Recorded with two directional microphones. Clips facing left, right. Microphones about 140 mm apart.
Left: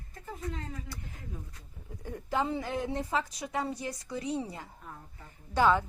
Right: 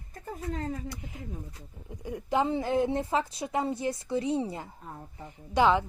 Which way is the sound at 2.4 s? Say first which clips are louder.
Right 6 dB; 25° right (ahead or behind).